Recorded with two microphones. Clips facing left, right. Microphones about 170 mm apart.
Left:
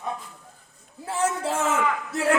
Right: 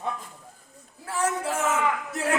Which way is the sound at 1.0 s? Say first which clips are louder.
Left 2 dB; 25° left (ahead or behind).